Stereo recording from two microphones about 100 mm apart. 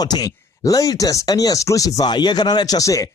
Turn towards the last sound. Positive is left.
turn(degrees=35)  # may be behind; listen again after turning